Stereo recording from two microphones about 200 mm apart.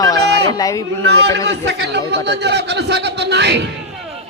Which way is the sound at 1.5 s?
60° right (ahead or behind).